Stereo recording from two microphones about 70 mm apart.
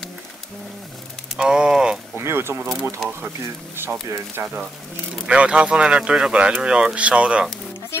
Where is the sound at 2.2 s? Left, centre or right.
Right.